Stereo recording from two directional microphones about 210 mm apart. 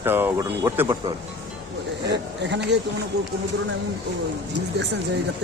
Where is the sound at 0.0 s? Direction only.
10° right (ahead or behind).